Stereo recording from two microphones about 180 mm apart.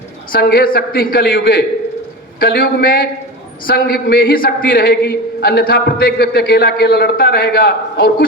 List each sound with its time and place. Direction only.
0.3 s a man's voice: 55° left (ahead or behind)